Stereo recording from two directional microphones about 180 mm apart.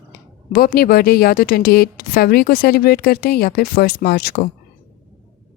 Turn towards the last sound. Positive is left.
turn(degrees=55)  # may be behind; listen again after turning